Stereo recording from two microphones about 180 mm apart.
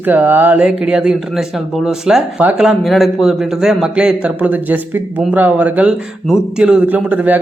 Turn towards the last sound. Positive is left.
turn(degrees=-10)  # may be behind; listen again after turning